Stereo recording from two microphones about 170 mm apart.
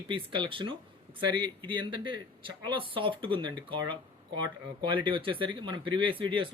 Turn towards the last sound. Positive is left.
turn(degrees=-30)  # may be behind; listen again after turning